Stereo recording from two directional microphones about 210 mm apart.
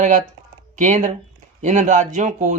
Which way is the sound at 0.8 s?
35° right (ahead or behind).